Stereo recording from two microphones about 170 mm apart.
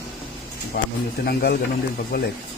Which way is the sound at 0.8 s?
60° left (ahead or behind).